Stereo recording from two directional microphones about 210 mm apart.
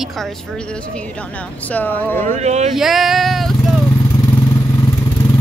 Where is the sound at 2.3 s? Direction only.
30° right (ahead or behind).